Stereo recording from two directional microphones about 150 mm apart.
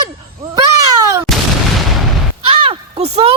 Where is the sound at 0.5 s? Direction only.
20° right (ahead or behind).